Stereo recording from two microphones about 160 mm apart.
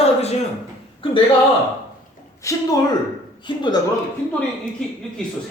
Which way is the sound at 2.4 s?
20° left (ahead or behind).